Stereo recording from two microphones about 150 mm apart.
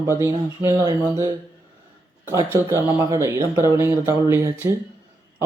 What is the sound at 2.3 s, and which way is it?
Speech, 15° right (ahead or behind).